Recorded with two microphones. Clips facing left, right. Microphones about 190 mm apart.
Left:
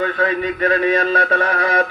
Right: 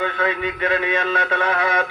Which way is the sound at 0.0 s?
40° left (ahead or behind).